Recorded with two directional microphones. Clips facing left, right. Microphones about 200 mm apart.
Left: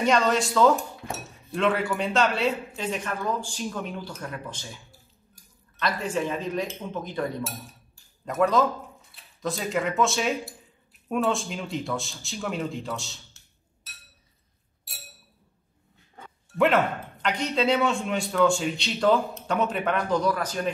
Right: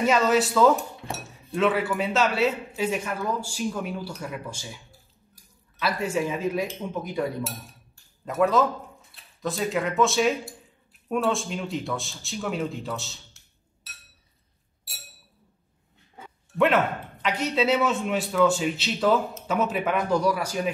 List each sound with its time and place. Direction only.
0.0 s a man's voice: 5° right (ahead or behind)
8.3 s speech: centre (ahead or behind)
16.2 s speech: centre (ahead or behind)